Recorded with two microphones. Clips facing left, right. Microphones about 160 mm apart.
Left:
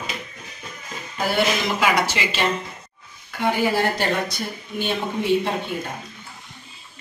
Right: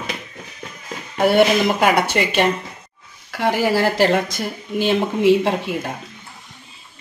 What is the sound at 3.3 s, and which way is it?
Speech, 90° right.